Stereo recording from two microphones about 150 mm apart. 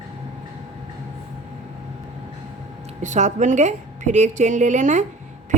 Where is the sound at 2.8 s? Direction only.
50° right (ahead or behind).